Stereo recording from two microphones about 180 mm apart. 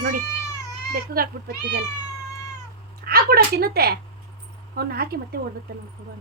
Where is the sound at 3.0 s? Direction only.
55° right (ahead or behind).